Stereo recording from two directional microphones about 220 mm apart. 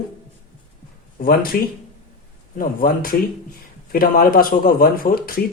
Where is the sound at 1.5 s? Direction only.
45° left (ahead or behind).